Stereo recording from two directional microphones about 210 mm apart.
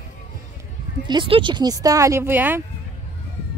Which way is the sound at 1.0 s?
25° right (ahead or behind).